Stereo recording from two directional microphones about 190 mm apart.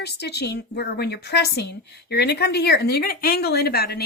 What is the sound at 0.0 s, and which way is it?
Speech, 60° left (ahead or behind).